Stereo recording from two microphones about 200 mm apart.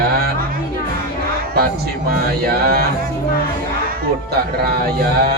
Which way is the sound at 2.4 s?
50° right (ahead or behind).